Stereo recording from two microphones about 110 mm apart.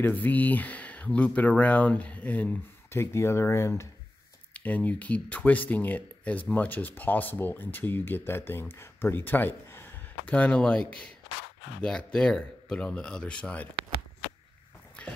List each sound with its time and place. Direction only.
0.0 s speech: 15° left (ahead or behind)
4.6 s speech: 15° left (ahead or behind)